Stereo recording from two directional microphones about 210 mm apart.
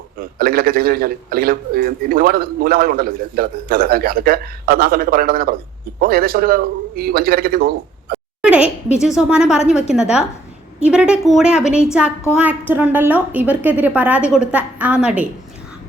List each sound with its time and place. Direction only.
0.3 s a man's voice: 45° right (ahead or behind)
8.4 s a sound: 5° right (ahead or behind)
9.0 s a woman's voice: centre (ahead or behind)